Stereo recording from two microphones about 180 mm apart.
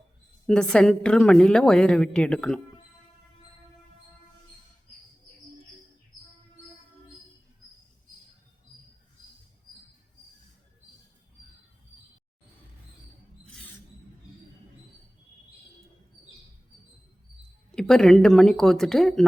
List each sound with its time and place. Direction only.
0.4 s a woman's voice: 5° left (ahead or behind)
13.4 s music: 5° left (ahead or behind)
17.7 s a woman's voice: 5° left (ahead or behind)